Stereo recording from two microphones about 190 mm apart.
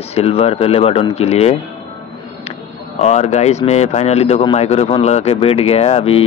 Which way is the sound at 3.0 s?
35° left (ahead or behind).